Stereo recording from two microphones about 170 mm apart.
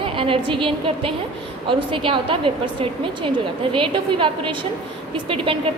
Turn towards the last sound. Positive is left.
turn(degrees=-30)  # may be behind; listen again after turning